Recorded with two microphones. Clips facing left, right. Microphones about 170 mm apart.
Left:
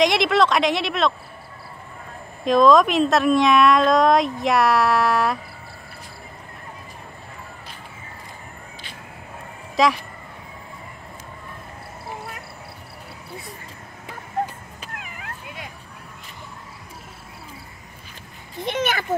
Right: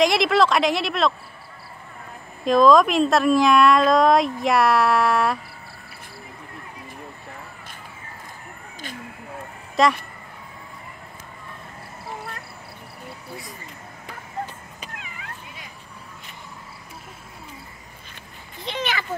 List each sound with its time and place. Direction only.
0.0 s speech: centre (ahead or behind)
2.4 s speech: centre (ahead or behind)
9.8 s speech: centre (ahead or behind)
15.0 s cat: 50° left (ahead or behind)
18.6 s speech: 50° left (ahead or behind)